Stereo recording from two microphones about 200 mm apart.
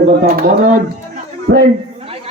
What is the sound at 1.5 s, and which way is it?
Speech, 85° right.